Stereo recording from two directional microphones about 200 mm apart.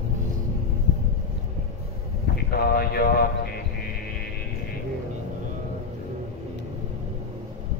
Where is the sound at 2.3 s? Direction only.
50° left (ahead or behind).